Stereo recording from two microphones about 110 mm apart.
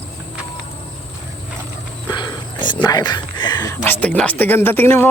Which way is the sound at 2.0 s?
45° left (ahead or behind).